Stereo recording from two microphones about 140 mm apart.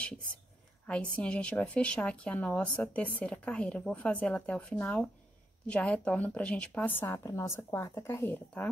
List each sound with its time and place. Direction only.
0.8 s a woman's voice: 10° left (ahead or behind)